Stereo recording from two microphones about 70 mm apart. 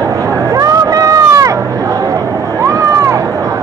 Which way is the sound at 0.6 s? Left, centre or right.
Right.